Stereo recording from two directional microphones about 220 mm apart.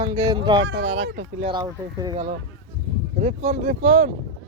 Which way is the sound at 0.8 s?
25° right (ahead or behind).